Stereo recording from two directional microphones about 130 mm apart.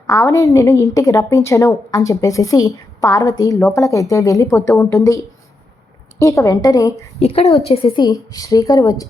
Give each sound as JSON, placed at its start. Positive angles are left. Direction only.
{"t": 0.1, "sound": "a woman's voice", "side_deg": 25}
{"t": 7.2, "sound": "a woman's voice", "side_deg": 50}
{"t": 8.0, "sound": "a woman's voice", "side_deg": 30}